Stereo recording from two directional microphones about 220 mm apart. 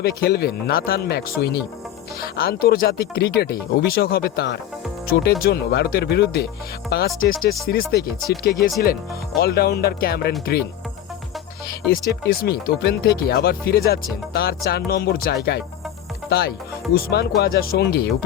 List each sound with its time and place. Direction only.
0.0 s speech: 45° left (ahead or behind)
11.9 s speech: 45° left (ahead or behind)
16.9 s speech: 45° left (ahead or behind)